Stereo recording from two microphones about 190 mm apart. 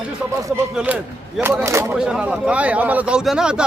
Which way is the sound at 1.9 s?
5° right (ahead or behind).